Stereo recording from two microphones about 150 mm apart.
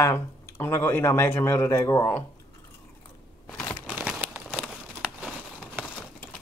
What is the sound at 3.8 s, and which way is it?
Crumpling, 5° right (ahead or behind).